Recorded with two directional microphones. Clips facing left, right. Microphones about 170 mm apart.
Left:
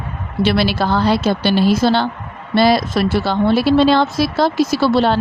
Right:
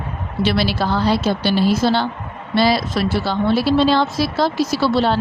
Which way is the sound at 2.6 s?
50° left (ahead or behind).